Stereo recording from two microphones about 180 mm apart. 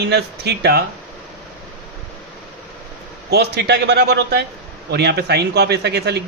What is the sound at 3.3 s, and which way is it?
A man's voice, 65° right (ahead or behind).